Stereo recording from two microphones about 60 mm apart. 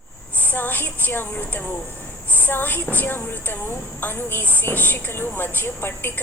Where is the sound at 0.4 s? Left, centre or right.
Left.